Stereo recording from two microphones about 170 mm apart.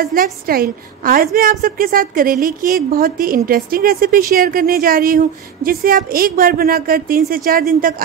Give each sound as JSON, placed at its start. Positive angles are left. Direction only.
{"t": 0.0, "sound": "a woman's voice", "side_deg": -55}